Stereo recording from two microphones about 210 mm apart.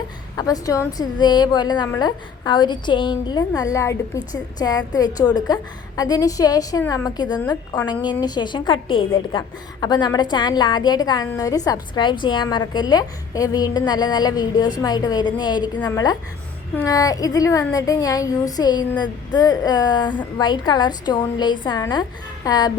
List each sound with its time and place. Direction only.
0.3 s a woman's voice: 15° left (ahead or behind)